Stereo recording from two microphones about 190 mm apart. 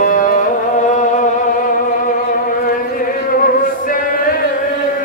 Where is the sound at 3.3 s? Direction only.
50° left (ahead or behind).